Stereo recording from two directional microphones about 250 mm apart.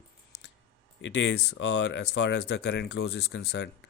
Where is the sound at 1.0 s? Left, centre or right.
Left.